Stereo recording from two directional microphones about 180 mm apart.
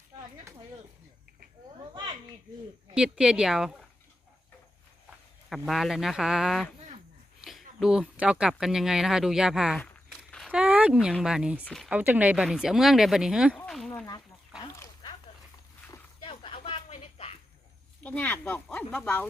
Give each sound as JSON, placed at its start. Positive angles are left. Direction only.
{"t": 2.9, "sound": "speech", "side_deg": -5}
{"t": 5.5, "sound": "speech", "side_deg": 0}
{"t": 7.8, "sound": "speech", "side_deg": -5}
{"t": 11.9, "sound": "speech", "side_deg": -10}
{"t": 13.7, "sound": "a sound", "side_deg": 0}
{"t": 14.6, "sound": "dog", "side_deg": 20}
{"t": 15.9, "sound": "a sound", "side_deg": 30}
{"t": 18.0, "sound": "speech", "side_deg": 10}